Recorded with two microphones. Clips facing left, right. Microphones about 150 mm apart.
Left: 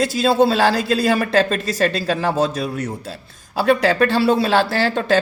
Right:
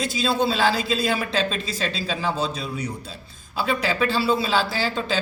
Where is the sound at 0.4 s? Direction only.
70° left (ahead or behind).